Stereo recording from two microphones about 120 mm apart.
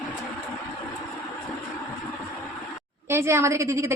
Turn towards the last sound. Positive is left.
turn(degrees=-25)  # may be behind; listen again after turning